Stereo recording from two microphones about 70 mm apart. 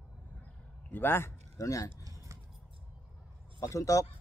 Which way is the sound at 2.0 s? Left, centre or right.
Right.